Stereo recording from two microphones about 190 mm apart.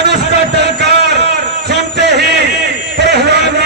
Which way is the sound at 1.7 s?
65° right (ahead or behind).